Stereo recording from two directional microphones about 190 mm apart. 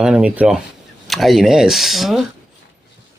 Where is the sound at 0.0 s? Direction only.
5° right (ahead or behind).